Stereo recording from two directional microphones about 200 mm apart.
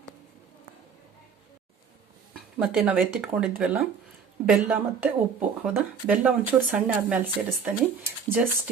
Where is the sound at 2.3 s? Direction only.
5° right (ahead or behind).